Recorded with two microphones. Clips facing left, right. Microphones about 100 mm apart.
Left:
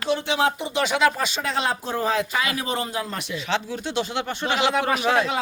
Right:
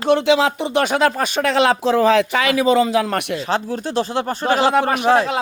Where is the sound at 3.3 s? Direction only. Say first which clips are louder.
Right 5 dB; 40° right (ahead or behind).